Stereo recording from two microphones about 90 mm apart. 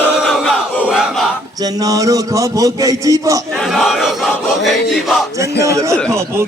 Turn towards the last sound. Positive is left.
turn(degrees=-30)  # may be behind; listen again after turning